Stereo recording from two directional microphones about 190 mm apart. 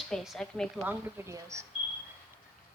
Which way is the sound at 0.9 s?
10° right (ahead or behind).